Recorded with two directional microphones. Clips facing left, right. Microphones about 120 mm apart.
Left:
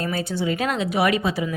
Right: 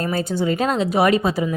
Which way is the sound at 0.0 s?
45° right (ahead or behind).